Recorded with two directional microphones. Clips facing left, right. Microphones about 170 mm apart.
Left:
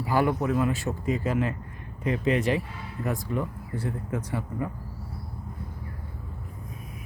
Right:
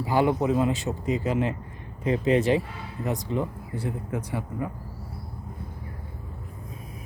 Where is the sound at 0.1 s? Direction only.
20° right (ahead or behind).